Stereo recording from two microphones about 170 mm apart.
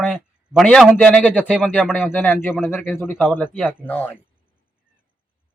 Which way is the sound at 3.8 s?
10° left (ahead or behind).